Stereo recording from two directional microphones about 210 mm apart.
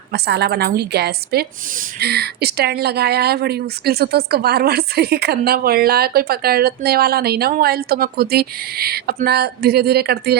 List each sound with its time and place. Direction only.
0.1 s speech: 50° right (ahead or behind)